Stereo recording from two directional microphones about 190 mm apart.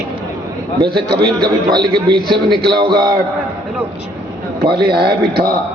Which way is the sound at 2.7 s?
25° right (ahead or behind).